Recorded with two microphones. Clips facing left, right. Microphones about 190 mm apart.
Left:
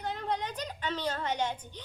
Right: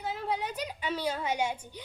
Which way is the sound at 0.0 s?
5° right (ahead or behind).